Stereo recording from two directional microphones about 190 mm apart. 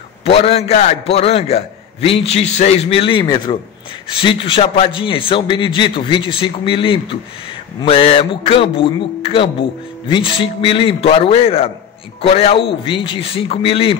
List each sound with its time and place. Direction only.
0.2 s a man's voice: 30° left (ahead or behind)